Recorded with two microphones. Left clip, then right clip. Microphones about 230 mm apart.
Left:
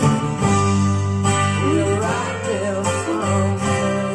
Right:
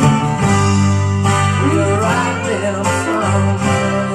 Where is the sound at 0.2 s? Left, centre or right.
Right.